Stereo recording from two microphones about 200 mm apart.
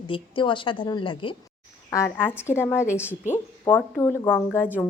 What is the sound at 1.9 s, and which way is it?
A woman's voice, 15° left (ahead or behind).